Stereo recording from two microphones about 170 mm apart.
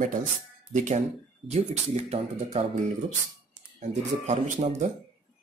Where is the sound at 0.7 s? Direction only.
45° right (ahead or behind).